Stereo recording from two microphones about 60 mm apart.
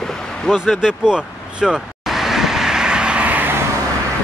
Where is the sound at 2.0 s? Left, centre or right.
Centre; by 3.5 s right.